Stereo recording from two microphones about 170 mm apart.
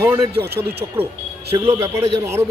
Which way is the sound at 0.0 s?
15° right (ahead or behind).